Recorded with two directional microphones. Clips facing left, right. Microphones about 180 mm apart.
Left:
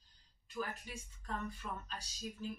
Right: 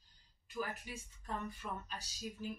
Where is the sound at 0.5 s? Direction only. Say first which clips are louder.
Right 1 dB; 5° right (ahead or behind).